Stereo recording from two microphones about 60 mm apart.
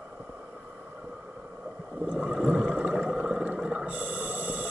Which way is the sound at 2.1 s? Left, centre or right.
Right.